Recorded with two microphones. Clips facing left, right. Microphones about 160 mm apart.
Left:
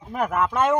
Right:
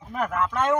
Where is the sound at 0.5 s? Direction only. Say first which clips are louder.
Left 2 dB; 10° left (ahead or behind).